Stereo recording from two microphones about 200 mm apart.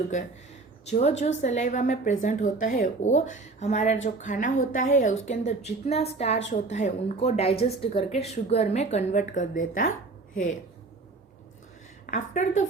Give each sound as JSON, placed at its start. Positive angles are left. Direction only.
{"t": 0.9, "sound": "a woman's voice", "side_deg": 35}
{"t": 12.1, "sound": "a woman's voice", "side_deg": 40}